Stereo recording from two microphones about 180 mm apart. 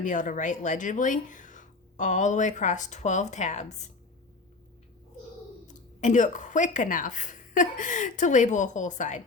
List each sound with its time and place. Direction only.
0.0 s speech: 45° left (ahead or behind)
5.6 s speech: 45° left (ahead or behind)